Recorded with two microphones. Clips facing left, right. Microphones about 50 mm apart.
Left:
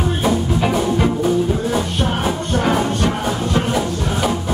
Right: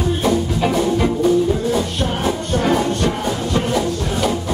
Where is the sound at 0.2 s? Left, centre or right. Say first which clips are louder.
Left 1 dB; centre.